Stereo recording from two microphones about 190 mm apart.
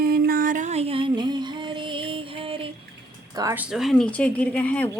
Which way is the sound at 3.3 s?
15° right (ahead or behind).